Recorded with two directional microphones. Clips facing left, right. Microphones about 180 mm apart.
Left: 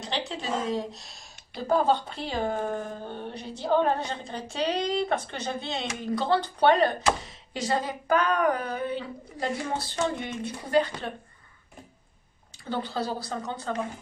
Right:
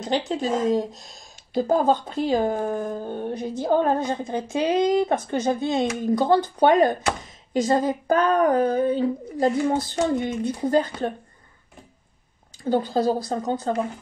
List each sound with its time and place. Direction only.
0.3 s speech: 45° right (ahead or behind)
12.6 s speech: 45° right (ahead or behind)